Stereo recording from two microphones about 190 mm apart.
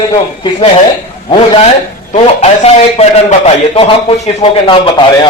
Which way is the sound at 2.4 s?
35° left (ahead or behind).